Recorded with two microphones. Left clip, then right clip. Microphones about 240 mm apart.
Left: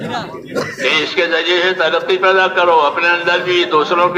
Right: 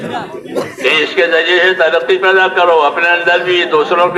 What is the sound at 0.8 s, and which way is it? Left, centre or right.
A man's voice, left.